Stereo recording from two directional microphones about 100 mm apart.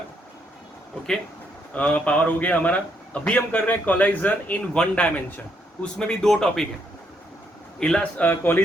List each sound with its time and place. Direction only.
1.7 s a man's voice: 15° left (ahead or behind)
7.8 s a man's voice: 10° left (ahead or behind)
8.3 s a man's voice: 20° left (ahead or behind)